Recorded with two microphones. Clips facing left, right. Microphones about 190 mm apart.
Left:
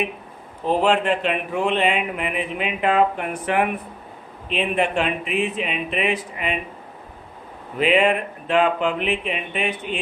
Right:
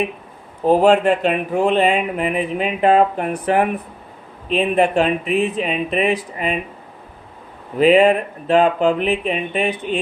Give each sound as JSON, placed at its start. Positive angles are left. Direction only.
{"t": 0.6, "sound": "speech", "side_deg": -45}
{"t": 7.8, "sound": "speech", "side_deg": -40}